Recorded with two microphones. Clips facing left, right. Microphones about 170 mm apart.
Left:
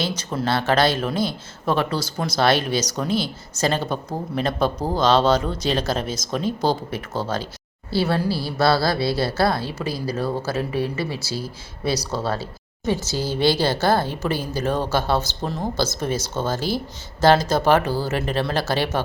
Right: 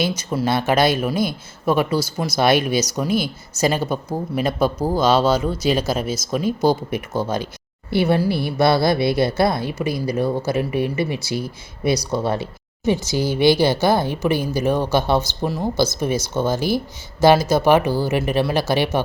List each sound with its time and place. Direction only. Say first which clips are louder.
0.2 s a woman's voice: right 3 dB; 10° right (ahead or behind)